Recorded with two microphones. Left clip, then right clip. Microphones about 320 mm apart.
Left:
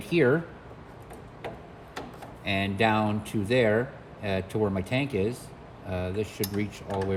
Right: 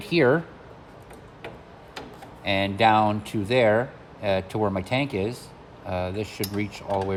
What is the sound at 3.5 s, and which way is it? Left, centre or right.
Speech, right.